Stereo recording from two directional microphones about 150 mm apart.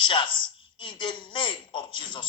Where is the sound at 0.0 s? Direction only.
30° left (ahead or behind).